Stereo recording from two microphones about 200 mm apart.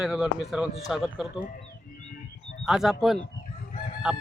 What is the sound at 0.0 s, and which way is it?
A man's voice, 5° right (ahead or behind).